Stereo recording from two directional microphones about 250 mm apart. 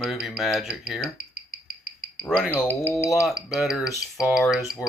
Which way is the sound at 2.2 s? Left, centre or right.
Centre.